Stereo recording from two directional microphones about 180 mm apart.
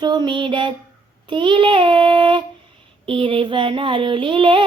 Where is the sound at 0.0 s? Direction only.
25° right (ahead or behind).